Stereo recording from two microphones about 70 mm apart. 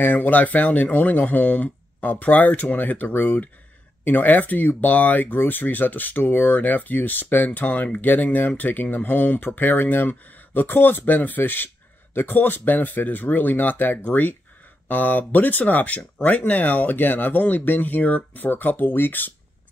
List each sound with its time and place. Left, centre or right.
0.0 s speech: left